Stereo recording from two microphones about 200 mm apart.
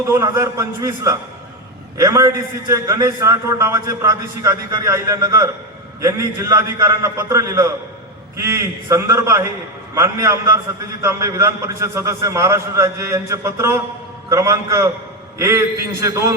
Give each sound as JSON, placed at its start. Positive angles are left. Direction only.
{"t": 0.1, "sound": "a man's voice", "side_deg": -15}